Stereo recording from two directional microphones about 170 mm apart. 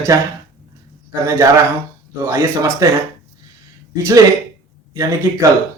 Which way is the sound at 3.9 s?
20° right (ahead or behind).